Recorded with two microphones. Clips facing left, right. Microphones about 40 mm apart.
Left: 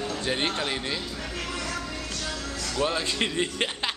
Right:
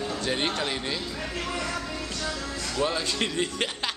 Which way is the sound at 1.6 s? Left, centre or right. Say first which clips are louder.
Right 1 dB; centre.